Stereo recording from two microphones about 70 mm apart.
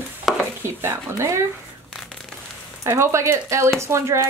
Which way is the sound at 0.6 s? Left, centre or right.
Right.